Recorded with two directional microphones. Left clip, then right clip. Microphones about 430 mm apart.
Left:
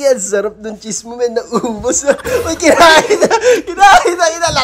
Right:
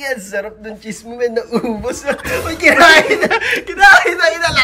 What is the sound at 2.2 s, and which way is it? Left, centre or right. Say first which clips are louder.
Speech: left 1 dB; centre.